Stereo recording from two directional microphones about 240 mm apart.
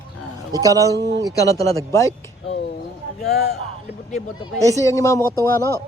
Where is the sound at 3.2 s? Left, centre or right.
Left.